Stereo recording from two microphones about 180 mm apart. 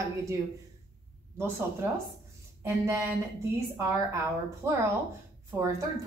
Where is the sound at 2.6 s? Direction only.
15° right (ahead or behind).